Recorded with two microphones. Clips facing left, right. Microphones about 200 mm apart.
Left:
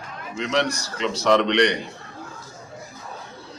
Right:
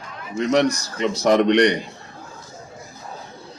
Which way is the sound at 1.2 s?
45° right (ahead or behind).